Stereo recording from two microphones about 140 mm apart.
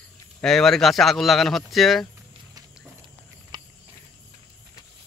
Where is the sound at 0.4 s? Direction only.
5° left (ahead or behind).